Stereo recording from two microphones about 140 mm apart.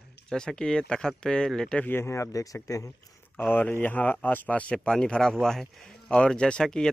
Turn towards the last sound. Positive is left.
turn(degrees=5)  # may be behind; listen again after turning